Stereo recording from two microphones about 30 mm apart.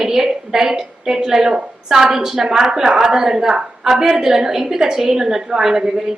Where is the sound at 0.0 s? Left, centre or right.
Centre.